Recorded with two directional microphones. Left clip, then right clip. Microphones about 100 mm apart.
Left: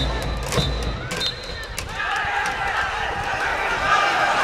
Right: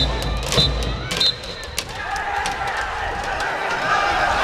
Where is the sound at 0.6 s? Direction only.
45° right (ahead or behind).